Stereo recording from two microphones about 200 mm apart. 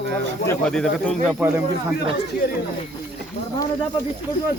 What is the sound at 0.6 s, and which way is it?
Speech, 5° left (ahead or behind).